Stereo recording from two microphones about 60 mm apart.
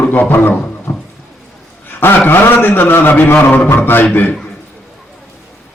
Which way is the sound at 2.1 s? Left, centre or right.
Left.